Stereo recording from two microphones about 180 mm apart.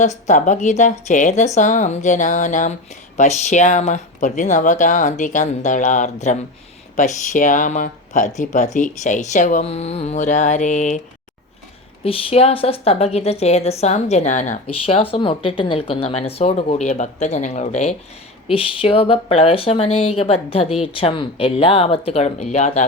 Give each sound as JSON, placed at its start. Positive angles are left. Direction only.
{"t": 0.0, "sound": "speech", "side_deg": 40}
{"t": 12.0, "sound": "speech", "side_deg": 30}
{"t": 14.8, "sound": "speech", "side_deg": 30}
{"t": 18.4, "sound": "speech", "side_deg": 30}